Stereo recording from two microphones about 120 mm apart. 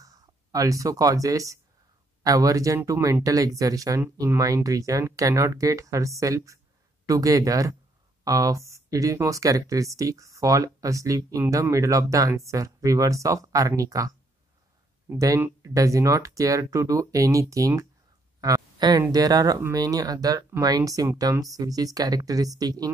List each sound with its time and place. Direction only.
0.0 s speech: 30° right (ahead or behind)
15.1 s speech: 30° right (ahead or behind)